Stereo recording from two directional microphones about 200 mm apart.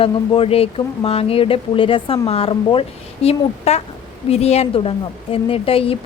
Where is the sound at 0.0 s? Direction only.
30° left (ahead or behind).